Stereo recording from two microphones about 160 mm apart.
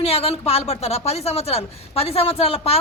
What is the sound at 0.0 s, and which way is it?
Speech, 40° left (ahead or behind).